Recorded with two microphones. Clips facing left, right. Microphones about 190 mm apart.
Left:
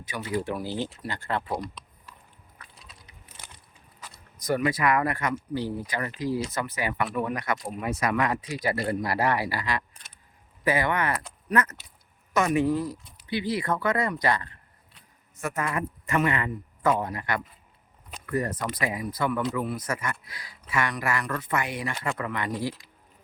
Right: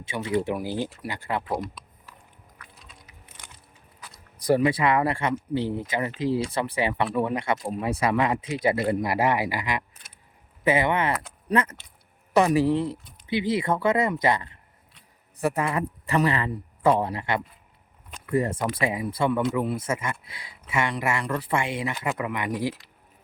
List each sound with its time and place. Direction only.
0.0 s speech: 25° right (ahead or behind); by 1.5 s 10° right (ahead or behind)
4.4 s a man's voice: 30° right (ahead or behind)